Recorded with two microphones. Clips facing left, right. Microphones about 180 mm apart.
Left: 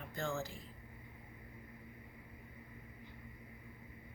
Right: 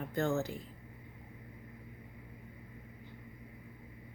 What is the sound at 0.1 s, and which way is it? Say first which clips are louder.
Speech: right 7 dB; 65° right (ahead or behind).